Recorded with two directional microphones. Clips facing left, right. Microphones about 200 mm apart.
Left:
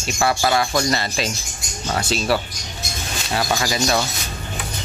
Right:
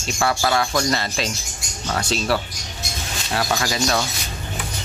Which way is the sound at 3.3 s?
5° left (ahead or behind).